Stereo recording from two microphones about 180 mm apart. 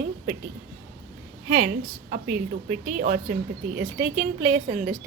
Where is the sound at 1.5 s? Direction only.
50° right (ahead or behind).